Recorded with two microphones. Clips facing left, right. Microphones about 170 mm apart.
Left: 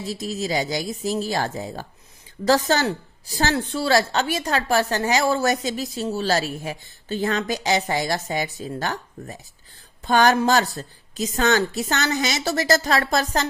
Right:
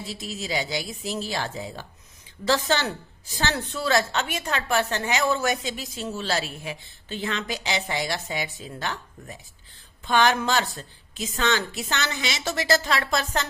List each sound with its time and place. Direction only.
0.0 s a woman's voice: 40° left (ahead or behind)